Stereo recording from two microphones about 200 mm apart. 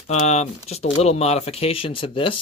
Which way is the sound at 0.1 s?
35° left (ahead or behind).